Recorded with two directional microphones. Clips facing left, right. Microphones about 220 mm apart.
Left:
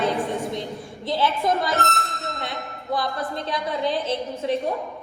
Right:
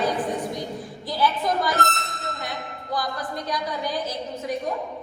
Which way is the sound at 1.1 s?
25° left (ahead or behind).